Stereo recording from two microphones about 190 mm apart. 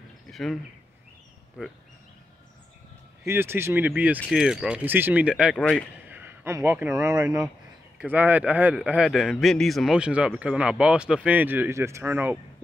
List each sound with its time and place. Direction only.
0.3 s bird: centre (ahead or behind)
1.6 s speech: centre (ahead or behind)
3.3 s a man's voice: 10° right (ahead or behind)
6.0 s a man's voice: 10° right (ahead or behind)